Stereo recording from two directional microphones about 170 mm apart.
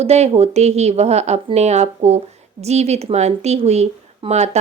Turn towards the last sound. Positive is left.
turn(degrees=-40)  # may be behind; listen again after turning